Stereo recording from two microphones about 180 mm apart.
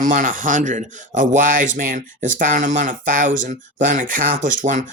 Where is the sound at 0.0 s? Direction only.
50° right (ahead or behind).